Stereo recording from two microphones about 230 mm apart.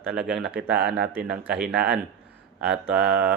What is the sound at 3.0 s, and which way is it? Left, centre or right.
Speech, right.